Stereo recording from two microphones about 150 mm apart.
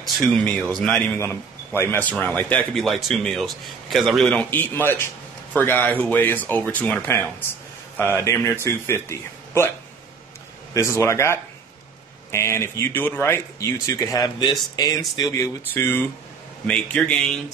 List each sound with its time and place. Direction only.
0.0 s speech: 5° left (ahead or behind)
1.7 s speech: 15° left (ahead or behind)
10.7 s speech: 20° left (ahead or behind); by 17.3 s 5° left (ahead or behind)